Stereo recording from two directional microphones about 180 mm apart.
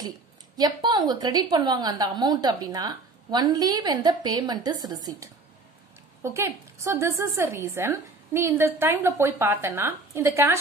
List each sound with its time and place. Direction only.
0.6 s a woman's voice: 20° right (ahead or behind)